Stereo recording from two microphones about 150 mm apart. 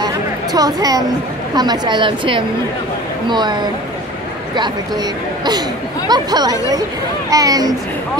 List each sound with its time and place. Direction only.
0.0 s a sound: 25° right (ahead or behind)
1.5 s a woman's voice: 30° right (ahead or behind)
6.0 s speech: 25° right (ahead or behind)